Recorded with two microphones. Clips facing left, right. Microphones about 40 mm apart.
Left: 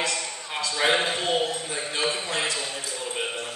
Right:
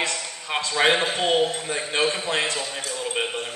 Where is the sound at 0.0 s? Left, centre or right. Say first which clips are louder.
Right 1 dB; right.